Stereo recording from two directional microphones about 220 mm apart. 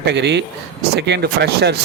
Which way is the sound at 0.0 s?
50° right (ahead or behind).